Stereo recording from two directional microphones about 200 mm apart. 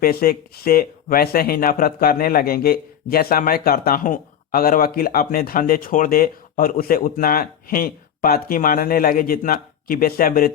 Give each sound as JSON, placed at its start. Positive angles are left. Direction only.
{"t": 0.0, "sound": "speech", "side_deg": 50}